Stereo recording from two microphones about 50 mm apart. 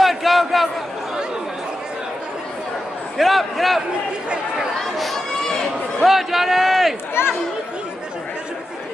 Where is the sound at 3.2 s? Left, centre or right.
Centre.